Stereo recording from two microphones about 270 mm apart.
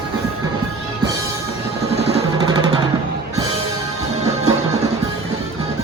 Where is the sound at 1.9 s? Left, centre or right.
Right.